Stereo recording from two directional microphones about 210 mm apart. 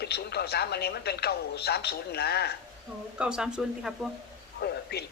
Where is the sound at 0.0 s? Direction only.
50° left (ahead or behind).